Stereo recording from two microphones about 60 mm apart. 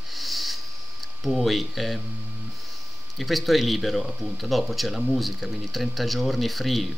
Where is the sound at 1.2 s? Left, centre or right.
Centre.